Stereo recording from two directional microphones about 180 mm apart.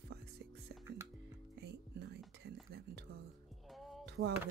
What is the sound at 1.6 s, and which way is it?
Music, 65° right (ahead or behind).